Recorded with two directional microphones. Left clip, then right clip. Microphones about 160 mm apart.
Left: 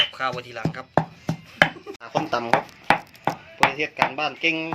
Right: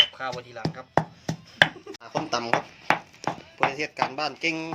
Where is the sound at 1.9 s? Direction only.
10° right (ahead or behind).